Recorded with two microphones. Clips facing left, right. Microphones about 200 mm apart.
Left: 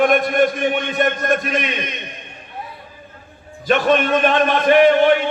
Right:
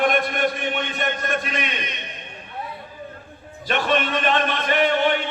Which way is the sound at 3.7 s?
45° left (ahead or behind).